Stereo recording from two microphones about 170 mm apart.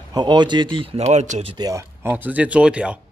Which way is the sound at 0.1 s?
25° right (ahead or behind).